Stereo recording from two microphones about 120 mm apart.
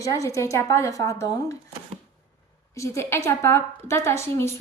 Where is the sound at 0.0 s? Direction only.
25° left (ahead or behind).